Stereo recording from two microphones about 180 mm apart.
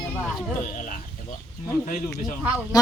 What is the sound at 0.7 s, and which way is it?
Livestock, 50° left (ahead or behind).